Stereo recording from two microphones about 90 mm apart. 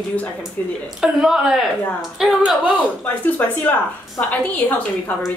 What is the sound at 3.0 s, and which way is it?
A woman's voice, 20° left (ahead or behind).